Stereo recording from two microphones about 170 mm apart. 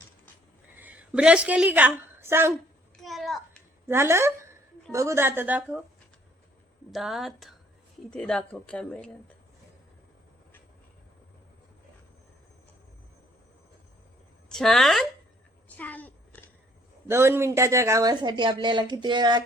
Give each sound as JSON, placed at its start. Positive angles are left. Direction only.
{"t": 0.8, "sound": "a woman's voice", "side_deg": -10}
{"t": 3.0, "sound": "a sound", "side_deg": 0}
{"t": 3.8, "sound": "a woman's voice", "side_deg": -15}
{"t": 6.9, "sound": "speech", "side_deg": 0}
{"t": 14.5, "sound": "speech", "side_deg": 0}
{"t": 15.8, "sound": "a sound", "side_deg": 10}
{"t": 17.1, "sound": "speech", "side_deg": -15}